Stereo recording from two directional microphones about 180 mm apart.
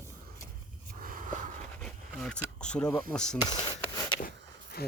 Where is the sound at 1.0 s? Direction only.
50° right (ahead or behind).